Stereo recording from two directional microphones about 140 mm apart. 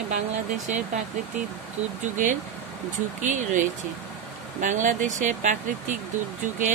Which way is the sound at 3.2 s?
60° right (ahead or behind).